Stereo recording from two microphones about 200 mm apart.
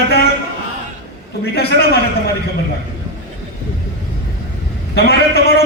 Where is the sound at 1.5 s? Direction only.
50° left (ahead or behind).